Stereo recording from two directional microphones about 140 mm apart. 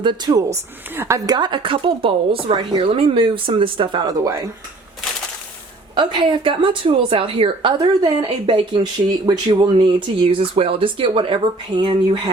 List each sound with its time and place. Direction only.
0.0 s a woman's voice: 30° right (ahead or behind)
1.4 s a woman's voice: 35° right (ahead or behind)
5.9 s a woman's voice: 35° right (ahead or behind)